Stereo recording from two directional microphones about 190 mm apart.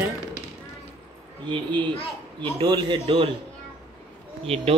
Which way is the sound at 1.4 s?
25° right (ahead or behind).